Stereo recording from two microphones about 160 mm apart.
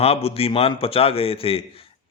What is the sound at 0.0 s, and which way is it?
A man's voice, 40° left (ahead or behind).